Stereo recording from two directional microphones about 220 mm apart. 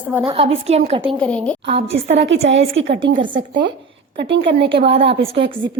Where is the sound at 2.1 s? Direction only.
55° right (ahead or behind).